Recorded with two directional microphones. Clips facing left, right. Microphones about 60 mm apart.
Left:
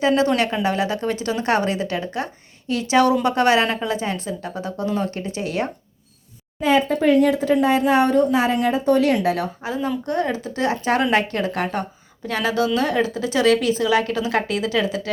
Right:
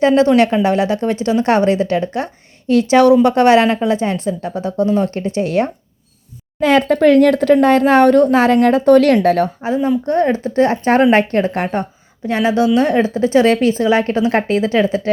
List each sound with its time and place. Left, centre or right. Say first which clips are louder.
0.0 s speech: right 7 dB; right
3.2 s speech: right 7 dB; right
6.6 s speech: right 6 dB; right
9.1 s a woman's voice: right 8 dB; right
9.6 s speech: right 8 dB; right